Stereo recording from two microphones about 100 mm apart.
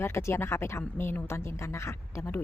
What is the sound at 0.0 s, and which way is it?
Speech, 25° left (ahead or behind).